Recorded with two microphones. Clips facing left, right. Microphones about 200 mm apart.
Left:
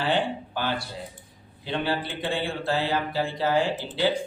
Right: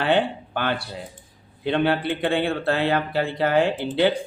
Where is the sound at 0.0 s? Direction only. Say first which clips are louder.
Right 4 dB; 60° right (ahead or behind).